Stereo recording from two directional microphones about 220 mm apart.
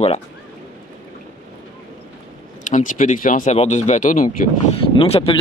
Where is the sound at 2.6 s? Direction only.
35° left (ahead or behind).